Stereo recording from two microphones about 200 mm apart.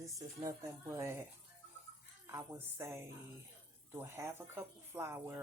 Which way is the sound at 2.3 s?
15° right (ahead or behind).